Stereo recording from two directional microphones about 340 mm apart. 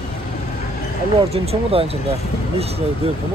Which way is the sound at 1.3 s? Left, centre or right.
Centre.